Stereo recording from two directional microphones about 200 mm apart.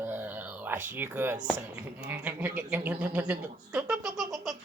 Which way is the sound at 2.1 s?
10° right (ahead or behind).